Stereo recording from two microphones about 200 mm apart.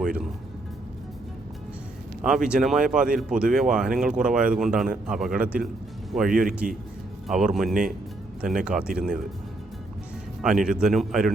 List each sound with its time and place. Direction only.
0.0 s speech: centre (ahead or behind)
2.2 s speech: 5° right (ahead or behind)
6.6 s a man's voice: 45° right (ahead or behind)
7.3 s speech: centre (ahead or behind)
10.4 s speech: 5° right (ahead or behind)